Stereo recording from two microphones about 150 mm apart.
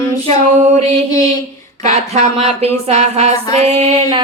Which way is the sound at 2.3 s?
40° right (ahead or behind).